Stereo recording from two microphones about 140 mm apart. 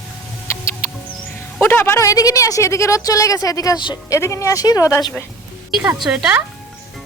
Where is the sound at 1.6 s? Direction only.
15° left (ahead or behind).